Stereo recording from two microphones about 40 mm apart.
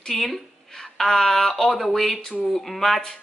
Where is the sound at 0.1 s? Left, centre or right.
Centre.